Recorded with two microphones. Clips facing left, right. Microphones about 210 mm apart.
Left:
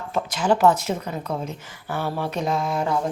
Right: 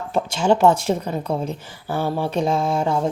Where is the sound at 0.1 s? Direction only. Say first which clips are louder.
Right 3 dB; 30° right (ahead or behind).